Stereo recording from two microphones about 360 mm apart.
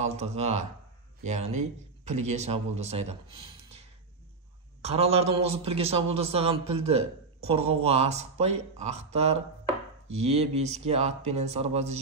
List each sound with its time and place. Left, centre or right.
0.0 s a man's voice: centre
4.8 s speech: centre